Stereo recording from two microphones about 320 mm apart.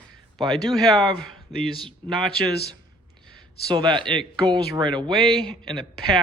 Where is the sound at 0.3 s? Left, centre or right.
Centre.